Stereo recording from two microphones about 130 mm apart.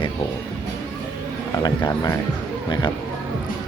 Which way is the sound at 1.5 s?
30° left (ahead or behind).